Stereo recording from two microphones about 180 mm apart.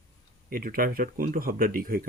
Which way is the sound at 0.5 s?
55° right (ahead or behind).